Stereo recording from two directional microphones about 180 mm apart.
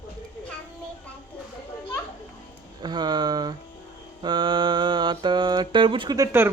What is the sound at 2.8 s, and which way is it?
Speech, 25° right (ahead or behind).